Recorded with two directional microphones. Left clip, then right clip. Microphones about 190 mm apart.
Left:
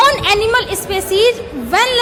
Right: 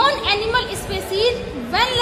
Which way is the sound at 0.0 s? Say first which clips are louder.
Left 6 dB; 35° left (ahead or behind).